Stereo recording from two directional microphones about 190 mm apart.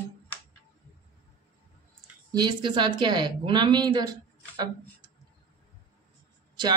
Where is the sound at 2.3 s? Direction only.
25° right (ahead or behind).